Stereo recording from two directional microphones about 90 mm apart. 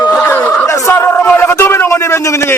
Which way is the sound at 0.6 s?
35° left (ahead or behind).